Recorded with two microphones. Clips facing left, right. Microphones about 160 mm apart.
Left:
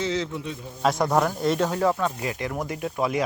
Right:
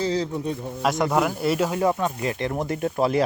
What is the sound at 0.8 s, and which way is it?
Speech, centre (ahead or behind).